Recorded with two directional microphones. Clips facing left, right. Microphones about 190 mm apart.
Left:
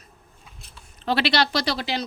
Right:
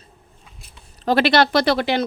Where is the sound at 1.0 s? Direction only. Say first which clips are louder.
Right 6 dB; 50° right (ahead or behind).